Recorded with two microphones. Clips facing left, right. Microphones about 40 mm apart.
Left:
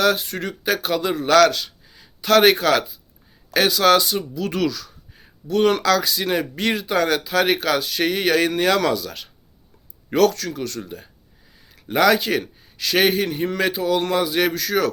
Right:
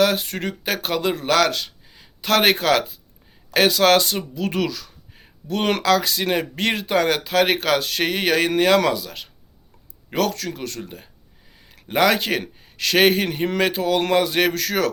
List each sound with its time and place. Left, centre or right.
0.0 s speech: right
1.2 s a man's voice: centre
1.5 s a sound: right
3.5 s speech: right
10.8 s speech: right